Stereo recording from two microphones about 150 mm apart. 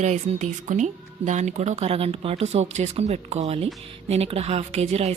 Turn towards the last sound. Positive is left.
turn(degrees=-45)  # may be behind; listen again after turning